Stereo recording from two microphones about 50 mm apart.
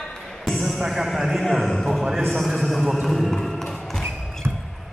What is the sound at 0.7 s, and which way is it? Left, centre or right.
A man's voice, centre.